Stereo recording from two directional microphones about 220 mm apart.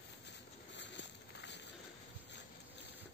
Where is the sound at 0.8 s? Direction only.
55° left (ahead or behind).